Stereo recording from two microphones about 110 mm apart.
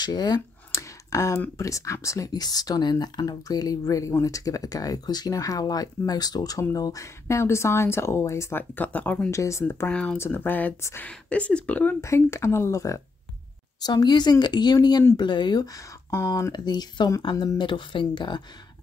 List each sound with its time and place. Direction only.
0.0 s a sound: 40° left (ahead or behind)
1.6 s speech: 30° left (ahead or behind)
9.3 s speech: 25° left (ahead or behind)
9.8 s speech: 10° left (ahead or behind)
11.1 s speech: 10° left (ahead or behind); by 13.0 s 25° left (ahead or behind)
13.8 s speech: 40° left (ahead or behind)
16.5 s speech: 40° left (ahead or behind)